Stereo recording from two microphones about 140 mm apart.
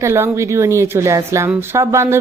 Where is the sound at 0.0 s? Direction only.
20° right (ahead or behind).